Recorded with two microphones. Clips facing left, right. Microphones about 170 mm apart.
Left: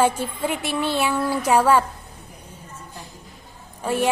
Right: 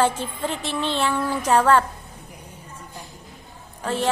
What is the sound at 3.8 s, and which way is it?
Speech, 10° left (ahead or behind).